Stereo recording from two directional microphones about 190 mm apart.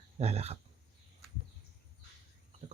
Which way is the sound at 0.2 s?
35° right (ahead or behind).